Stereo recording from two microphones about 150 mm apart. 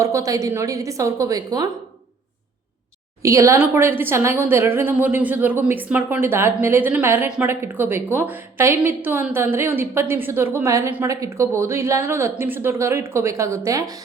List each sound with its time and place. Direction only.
0.0 s a woman's voice: 20° right (ahead or behind)
3.2 s a woman's voice: 20° right (ahead or behind)